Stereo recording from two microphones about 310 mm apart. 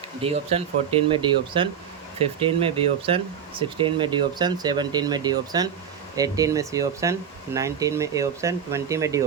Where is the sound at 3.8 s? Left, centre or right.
Centre.